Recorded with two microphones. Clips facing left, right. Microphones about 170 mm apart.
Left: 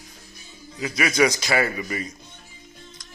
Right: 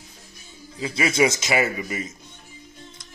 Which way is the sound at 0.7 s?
25° right (ahead or behind).